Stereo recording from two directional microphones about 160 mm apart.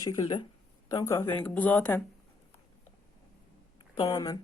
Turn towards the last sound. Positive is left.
turn(degrees=20)  # may be behind; listen again after turning